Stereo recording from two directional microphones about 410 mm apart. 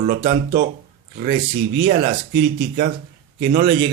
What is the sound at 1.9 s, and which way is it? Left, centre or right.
Speech, right.